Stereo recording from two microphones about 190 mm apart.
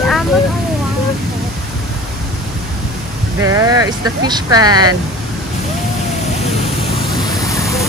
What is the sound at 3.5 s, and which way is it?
Vehicle, 15° right (ahead or behind).